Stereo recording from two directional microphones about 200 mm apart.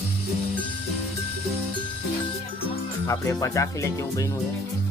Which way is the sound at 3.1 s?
15° left (ahead or behind).